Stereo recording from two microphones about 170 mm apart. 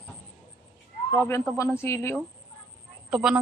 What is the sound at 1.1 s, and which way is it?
Speech, 15° left (ahead or behind).